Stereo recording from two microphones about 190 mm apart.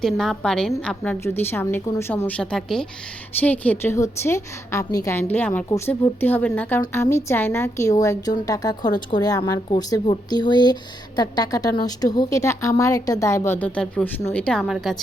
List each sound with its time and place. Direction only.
0.0 s a woman's voice: centre (ahead or behind)